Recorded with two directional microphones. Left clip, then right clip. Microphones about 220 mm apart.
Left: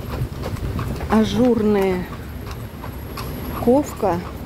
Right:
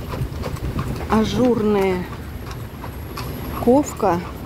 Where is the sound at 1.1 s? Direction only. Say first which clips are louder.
Left 1 dB; centre (ahead or behind).